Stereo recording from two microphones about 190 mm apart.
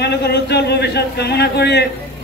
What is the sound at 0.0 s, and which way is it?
A man's voice, 60° left (ahead or behind).